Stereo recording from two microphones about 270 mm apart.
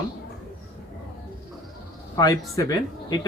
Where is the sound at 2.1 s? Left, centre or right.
Centre.